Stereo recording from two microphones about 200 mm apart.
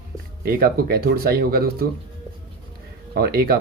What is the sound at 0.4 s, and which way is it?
Speech, 50° right (ahead or behind).